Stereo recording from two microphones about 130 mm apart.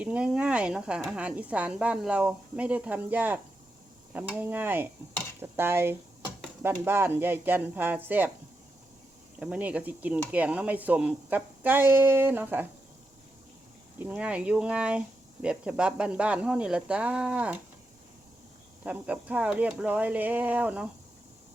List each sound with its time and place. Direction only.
0.0 s speech: 10° right (ahead or behind)
9.4 s speech: 10° right (ahead or behind)
14.0 s speech: 10° right (ahead or behind)
18.8 s speech: 10° right (ahead or behind)